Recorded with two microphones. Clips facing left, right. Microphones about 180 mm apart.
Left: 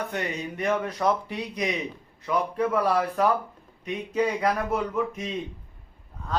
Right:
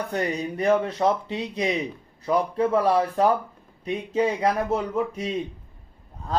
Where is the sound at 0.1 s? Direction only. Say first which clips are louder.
Right 4 dB; 35° right (ahead or behind).